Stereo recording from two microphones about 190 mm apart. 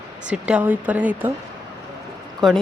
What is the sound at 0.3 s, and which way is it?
Speech, 5° right (ahead or behind).